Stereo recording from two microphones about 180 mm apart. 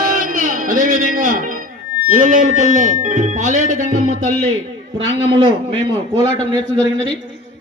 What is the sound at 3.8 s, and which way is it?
Speech, 40° left (ahead or behind).